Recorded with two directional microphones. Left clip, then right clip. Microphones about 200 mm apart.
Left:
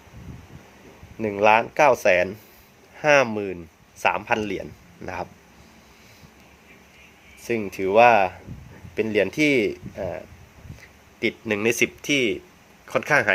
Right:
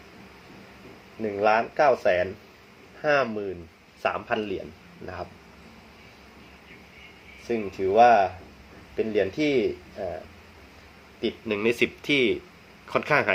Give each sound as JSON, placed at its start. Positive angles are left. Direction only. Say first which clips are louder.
{"t": 1.2, "sound": "speech", "louder": "left 4 dB", "side_deg": 50}
{"t": 4.0, "sound": "speech", "louder": "left 5 dB", "side_deg": 40}
{"t": 7.4, "sound": "speech", "louder": "left 2 dB", "side_deg": 50}
{"t": 11.2, "sound": "speech", "louder": "left 3 dB", "side_deg": 40}